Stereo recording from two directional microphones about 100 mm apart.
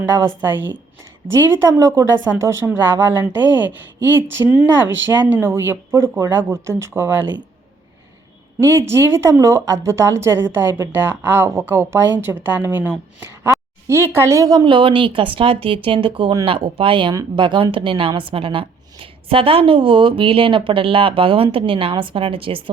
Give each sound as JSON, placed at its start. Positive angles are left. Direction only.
{"t": 0.4, "sound": "a woman's voice", "side_deg": -20}
{"t": 1.5, "sound": "a woman's voice", "side_deg": -30}
{"t": 4.4, "sound": "a woman's voice", "side_deg": -35}
{"t": 5.2, "sound": "a woman's voice", "side_deg": -25}
{"t": 8.6, "sound": "a woman's voice", "side_deg": -25}
{"t": 14.6, "sound": "a woman's voice", "side_deg": -60}